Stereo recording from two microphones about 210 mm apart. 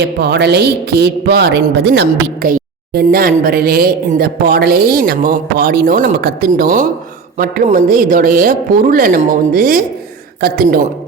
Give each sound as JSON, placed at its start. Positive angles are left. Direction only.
{"t": 0.0, "sound": "speech", "side_deg": -50}